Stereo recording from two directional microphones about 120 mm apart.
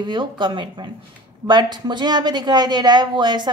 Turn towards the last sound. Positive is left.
turn(degrees=-35)  # may be behind; listen again after turning